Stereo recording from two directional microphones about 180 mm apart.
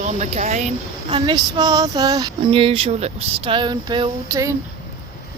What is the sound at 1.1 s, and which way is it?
Female singing, 25° right (ahead or behind).